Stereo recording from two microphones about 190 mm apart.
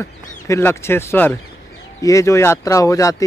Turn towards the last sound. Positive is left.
turn(degrees=15)  # may be behind; listen again after turning